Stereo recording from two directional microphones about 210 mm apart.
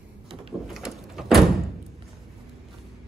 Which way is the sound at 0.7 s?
Centre (ahead or behind).